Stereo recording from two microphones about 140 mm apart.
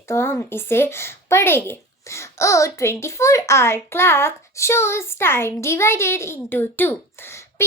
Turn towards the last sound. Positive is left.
turn(degrees=15)  # may be behind; listen again after turning